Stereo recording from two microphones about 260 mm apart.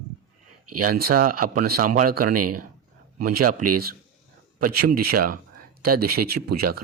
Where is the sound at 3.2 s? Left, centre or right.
Right.